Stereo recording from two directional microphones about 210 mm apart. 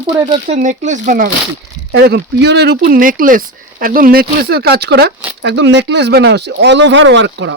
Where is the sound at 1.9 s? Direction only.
50° right (ahead or behind).